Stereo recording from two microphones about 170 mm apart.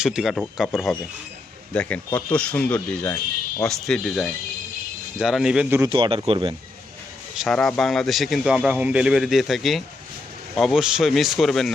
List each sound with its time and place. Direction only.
0.0 s a man's voice: 5° right (ahead or behind)
5.9 s speech: 30° right (ahead or behind)
7.4 s a man's voice: 5° left (ahead or behind)